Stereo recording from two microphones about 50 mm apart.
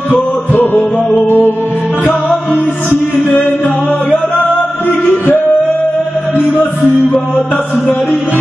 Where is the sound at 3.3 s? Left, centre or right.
Left.